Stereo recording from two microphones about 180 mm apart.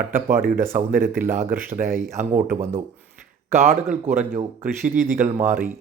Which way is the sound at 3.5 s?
40° right (ahead or behind).